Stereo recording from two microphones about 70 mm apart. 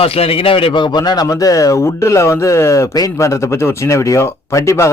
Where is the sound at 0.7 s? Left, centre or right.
Left.